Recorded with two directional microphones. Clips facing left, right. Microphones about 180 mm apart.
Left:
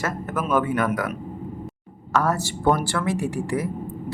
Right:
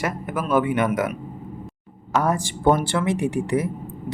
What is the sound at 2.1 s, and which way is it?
Speech, 20° right (ahead or behind).